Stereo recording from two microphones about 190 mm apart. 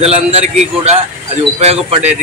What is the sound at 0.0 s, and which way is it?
A man's voice, 30° right (ahead or behind).